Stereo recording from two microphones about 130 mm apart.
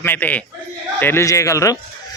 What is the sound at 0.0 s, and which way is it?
Speech, 15° left (ahead or behind).